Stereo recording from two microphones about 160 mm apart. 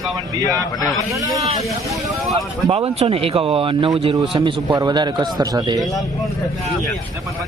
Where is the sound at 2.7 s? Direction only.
40° right (ahead or behind).